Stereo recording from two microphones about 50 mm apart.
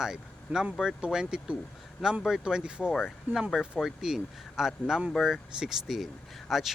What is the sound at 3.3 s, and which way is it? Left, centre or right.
Speech, right.